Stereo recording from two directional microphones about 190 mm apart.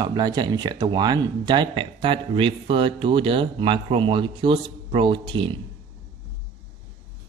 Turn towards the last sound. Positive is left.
turn(degrees=-25)  # may be behind; listen again after turning